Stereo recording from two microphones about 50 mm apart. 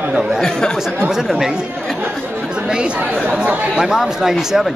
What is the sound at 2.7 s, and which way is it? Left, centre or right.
Speech, right.